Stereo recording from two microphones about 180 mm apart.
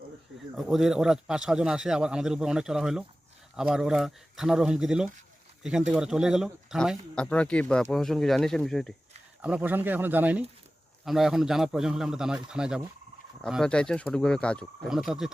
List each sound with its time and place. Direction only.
0.5 s speech: centre (ahead or behind)
9.4 s speech: 10° right (ahead or behind)